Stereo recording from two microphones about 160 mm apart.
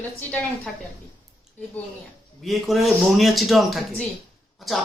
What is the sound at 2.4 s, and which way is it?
A man's voice, centre (ahead or behind).